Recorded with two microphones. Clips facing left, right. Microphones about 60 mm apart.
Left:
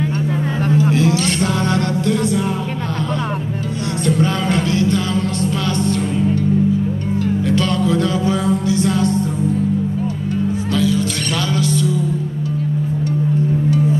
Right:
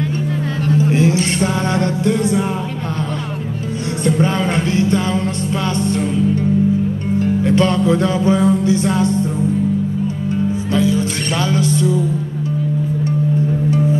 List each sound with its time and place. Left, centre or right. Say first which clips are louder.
0.9 s music: right 1 dB; right
4.0 s music: right 2 dB; right
10.7 s music: right 2 dB; right